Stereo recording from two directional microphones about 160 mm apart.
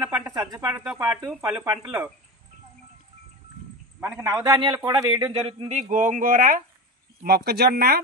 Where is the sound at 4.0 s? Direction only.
20° right (ahead or behind).